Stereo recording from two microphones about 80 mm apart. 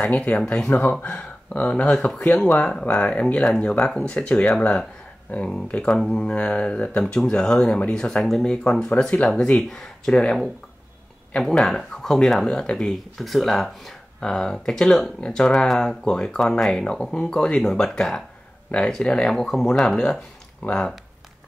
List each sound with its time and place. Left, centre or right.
0.0 s speech: centre
0.7 s speech: left; by 2.1 s centre
2.1 s speech: centre
2.5 s speech: centre